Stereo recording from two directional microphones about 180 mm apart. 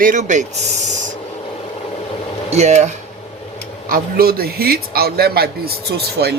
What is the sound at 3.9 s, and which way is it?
A man's voice, 55° right (ahead or behind).